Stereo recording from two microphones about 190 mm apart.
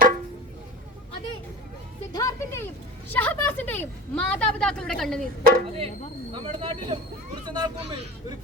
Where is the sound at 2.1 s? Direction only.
15° left (ahead or behind).